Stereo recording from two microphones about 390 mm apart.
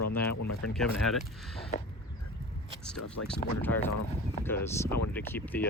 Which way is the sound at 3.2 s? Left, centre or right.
Left.